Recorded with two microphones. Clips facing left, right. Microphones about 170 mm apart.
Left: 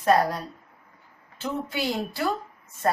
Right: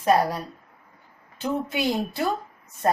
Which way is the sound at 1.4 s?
20° right (ahead or behind).